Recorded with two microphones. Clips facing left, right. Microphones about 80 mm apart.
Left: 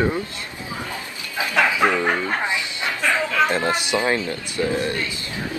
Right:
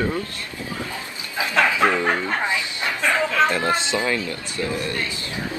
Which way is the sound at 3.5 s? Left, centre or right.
Left.